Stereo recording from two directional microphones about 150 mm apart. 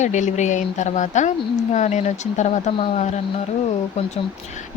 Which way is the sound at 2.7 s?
35° left (ahead or behind).